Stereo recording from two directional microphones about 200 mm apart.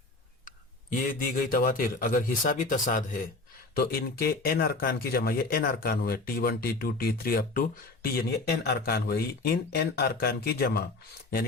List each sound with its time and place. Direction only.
0.4 s speech: 40° left (ahead or behind)